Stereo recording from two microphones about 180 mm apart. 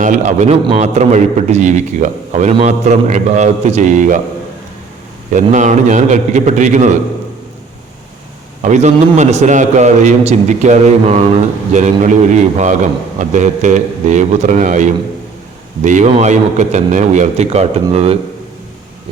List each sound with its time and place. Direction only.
0.0 s a man's voice: 45° right (ahead or behind)
5.3 s a man's voice: 45° right (ahead or behind)
8.6 s a man's voice: 40° right (ahead or behind)